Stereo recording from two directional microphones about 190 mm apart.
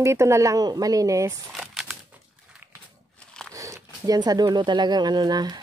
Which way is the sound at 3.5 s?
15° right (ahead or behind).